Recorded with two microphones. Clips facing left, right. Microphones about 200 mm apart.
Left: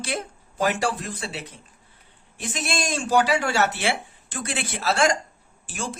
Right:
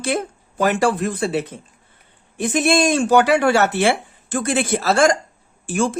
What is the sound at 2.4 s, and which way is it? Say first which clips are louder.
Speech: right 12 dB; 55° right (ahead or behind).